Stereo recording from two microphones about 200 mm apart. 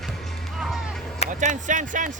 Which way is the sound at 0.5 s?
Centre (ahead or behind).